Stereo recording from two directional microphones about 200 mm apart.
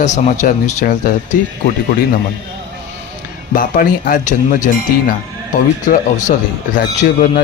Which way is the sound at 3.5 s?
45° left (ahead or behind).